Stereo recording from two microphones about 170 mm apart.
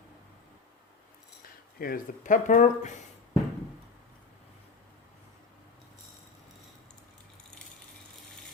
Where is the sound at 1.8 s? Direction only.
55° left (ahead or behind).